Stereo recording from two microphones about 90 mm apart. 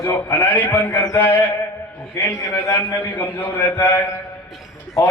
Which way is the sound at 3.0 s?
20° left (ahead or behind).